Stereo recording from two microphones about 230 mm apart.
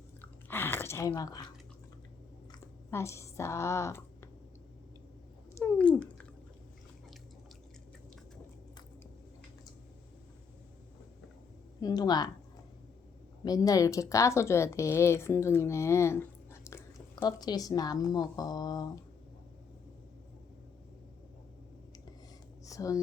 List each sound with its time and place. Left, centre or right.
0.2 s chewing: centre
2.5 s a sound: centre
5.5 s speech: centre
11.8 s speech: centre
13.4 s speech: centre
22.6 s a sound: centre